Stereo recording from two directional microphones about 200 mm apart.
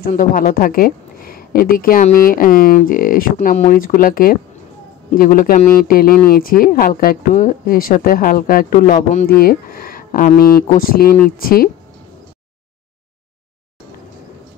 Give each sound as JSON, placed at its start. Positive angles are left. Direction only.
{"t": 0.0, "sound": "speech", "side_deg": 45}